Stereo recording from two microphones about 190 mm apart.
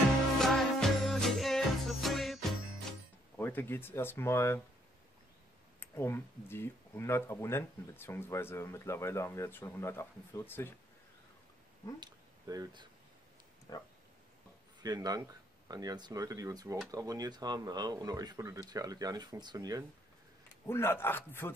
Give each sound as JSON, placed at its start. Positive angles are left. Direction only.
{"t": 0.4, "sound": "music", "side_deg": 0}
{"t": 3.3, "sound": "speech", "side_deg": 10}
{"t": 5.8, "sound": "speech", "side_deg": 15}
{"t": 12.0, "sound": "speech", "side_deg": -20}
{"t": 13.7, "sound": "a sound", "side_deg": 20}
{"t": 14.8, "sound": "speech", "side_deg": -20}
{"t": 20.6, "sound": "speech", "side_deg": 10}